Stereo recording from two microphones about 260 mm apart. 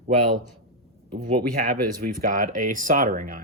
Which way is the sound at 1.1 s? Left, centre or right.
Right.